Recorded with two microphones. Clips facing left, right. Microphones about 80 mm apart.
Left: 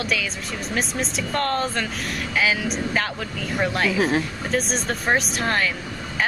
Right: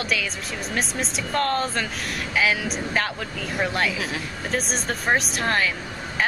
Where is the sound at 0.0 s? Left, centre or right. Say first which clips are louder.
Left 1 dB; centre.